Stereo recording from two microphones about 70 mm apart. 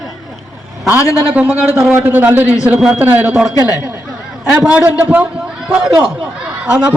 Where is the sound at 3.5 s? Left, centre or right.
Left.